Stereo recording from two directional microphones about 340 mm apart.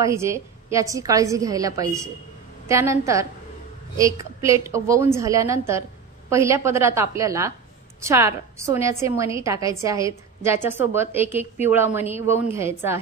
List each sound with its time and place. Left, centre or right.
0.0 s a woman's voice: centre